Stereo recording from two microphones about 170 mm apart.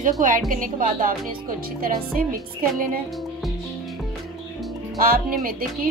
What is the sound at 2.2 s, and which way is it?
Speech, 55° right (ahead or behind).